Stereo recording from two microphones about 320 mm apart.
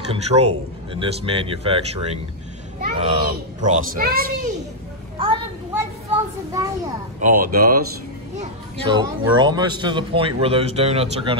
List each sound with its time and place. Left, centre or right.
0.1 s a child's voice: centre
5.2 s a child's voice: centre
7.2 s a child's voice: right
8.4 s speech: centre